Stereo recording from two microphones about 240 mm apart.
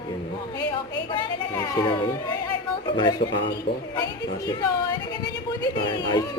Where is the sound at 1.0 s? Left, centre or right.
Centre.